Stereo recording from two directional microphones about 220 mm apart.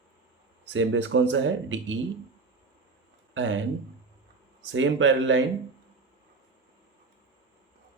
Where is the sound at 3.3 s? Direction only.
60° right (ahead or behind).